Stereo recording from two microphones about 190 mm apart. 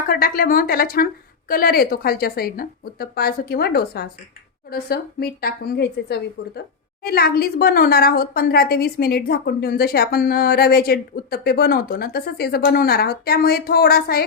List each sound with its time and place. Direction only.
0.1 s a woman's voice: 50° left (ahead or behind)